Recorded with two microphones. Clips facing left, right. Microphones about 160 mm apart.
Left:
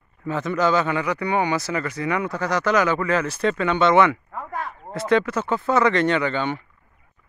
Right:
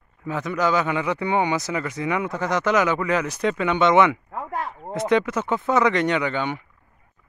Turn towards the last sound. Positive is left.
turn(degrees=-10)  # may be behind; listen again after turning